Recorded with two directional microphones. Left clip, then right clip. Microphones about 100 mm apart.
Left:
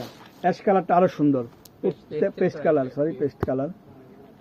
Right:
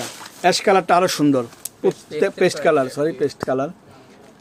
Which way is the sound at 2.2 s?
20° right (ahead or behind).